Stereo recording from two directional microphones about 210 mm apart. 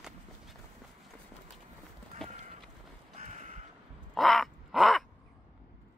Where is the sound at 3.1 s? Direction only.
35° right (ahead or behind).